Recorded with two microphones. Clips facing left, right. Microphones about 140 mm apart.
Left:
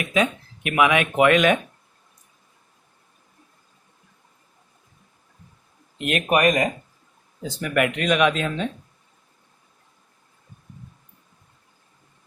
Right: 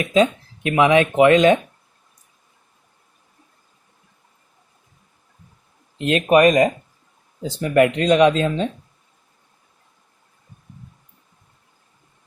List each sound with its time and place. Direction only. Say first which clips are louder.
0.0 s speech: right 6 dB; 30° right (ahead or behind)
6.0 s speech: right 6 dB; 25° right (ahead or behind)